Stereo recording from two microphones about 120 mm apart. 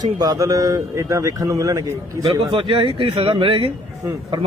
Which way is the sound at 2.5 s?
45° right (ahead or behind).